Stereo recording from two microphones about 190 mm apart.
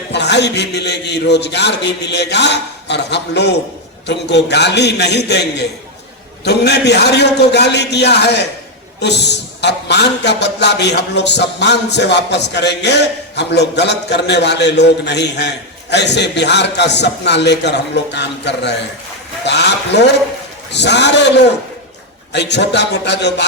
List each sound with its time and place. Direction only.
0.1 s a man's voice: 65° left (ahead or behind)